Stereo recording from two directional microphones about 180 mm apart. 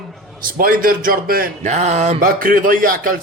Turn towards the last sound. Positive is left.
turn(degrees=-50)  # may be behind; listen again after turning